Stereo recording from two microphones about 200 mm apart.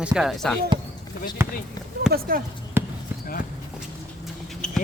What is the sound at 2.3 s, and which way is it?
Speech, 45° right (ahead or behind).